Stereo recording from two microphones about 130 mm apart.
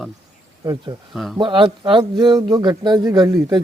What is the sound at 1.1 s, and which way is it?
Speech, centre (ahead or behind).